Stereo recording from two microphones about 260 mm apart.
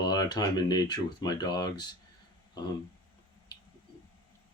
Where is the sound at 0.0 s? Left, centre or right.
Centre.